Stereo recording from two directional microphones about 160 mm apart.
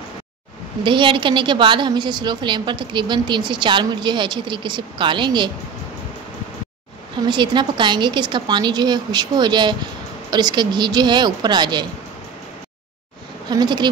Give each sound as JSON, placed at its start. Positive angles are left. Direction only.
{"t": 0.8, "sound": "a woman's voice", "side_deg": -30}
{"t": 7.2, "sound": "a woman's voice", "side_deg": -30}
{"t": 13.5, "sound": "a woman's voice", "side_deg": -25}